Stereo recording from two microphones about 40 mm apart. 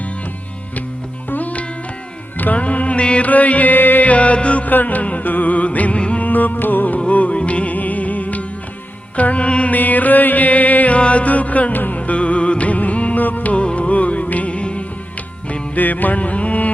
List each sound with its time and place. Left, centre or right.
1.3 s music: left
3.2 s music: left
4.1 s music: left
6.2 s mantra: left
7.1 s music: left
9.7 s mantra: left
11.9 s music: left
15.7 s music: left